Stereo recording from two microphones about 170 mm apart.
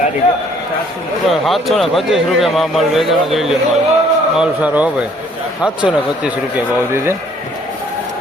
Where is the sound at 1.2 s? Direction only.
Centre (ahead or behind).